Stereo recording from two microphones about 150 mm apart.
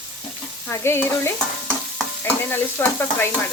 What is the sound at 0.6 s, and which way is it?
Speech, 15° left (ahead or behind).